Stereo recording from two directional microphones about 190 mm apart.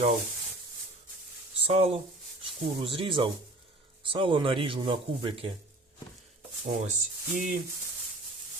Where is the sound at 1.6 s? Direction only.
30° right (ahead or behind).